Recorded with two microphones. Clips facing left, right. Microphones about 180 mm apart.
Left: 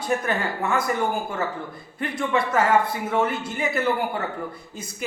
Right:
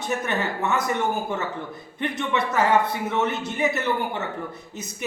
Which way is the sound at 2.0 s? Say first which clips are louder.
Left 1 dB; 25° right (ahead or behind).